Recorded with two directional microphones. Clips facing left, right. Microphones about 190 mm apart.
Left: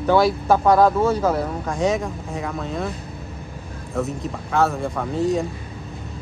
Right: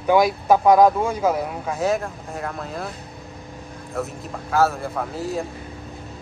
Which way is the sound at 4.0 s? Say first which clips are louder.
Left 4 dB; centre (ahead or behind).